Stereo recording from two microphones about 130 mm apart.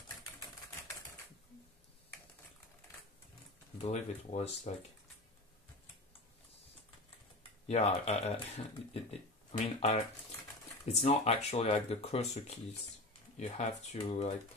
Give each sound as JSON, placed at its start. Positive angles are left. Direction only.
{"t": 3.7, "sound": "speech", "side_deg": 55}
{"t": 7.6, "sound": "speech", "side_deg": 55}